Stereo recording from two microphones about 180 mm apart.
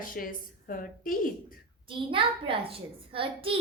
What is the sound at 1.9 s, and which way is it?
A child's voice, 30° right (ahead or behind).